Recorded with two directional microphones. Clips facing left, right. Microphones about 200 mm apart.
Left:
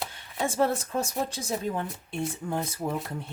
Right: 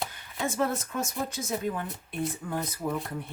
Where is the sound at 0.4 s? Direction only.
30° left (ahead or behind).